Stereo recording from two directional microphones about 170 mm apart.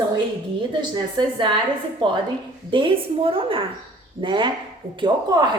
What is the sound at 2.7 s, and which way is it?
A woman's voice, 30° right (ahead or behind).